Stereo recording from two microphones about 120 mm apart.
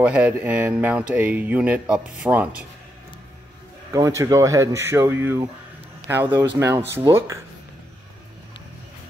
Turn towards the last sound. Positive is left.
turn(degrees=-25)  # may be behind; listen again after turning